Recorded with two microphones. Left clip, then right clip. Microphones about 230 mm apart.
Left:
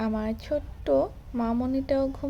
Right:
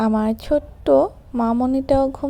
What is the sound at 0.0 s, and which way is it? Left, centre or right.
A woman's voice, right.